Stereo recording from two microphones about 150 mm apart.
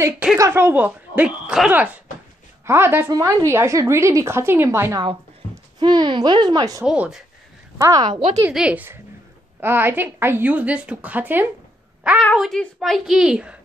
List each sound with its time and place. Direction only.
0.4 s a woman's voice: 15° right (ahead or behind)
5.8 s speech: 30° right (ahead or behind)
6.8 s a woman's voice: 5° right (ahead or behind)
7.8 s speech: 25° right (ahead or behind)
8.5 s a woman's voice: 10° right (ahead or behind)
12.4 s a woman's voice: centre (ahead or behind)